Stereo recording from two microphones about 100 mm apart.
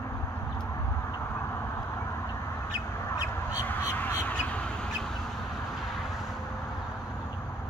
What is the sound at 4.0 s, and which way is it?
Crow, 15° left (ahead or behind).